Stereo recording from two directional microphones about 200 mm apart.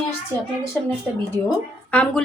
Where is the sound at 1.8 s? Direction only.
5° left (ahead or behind).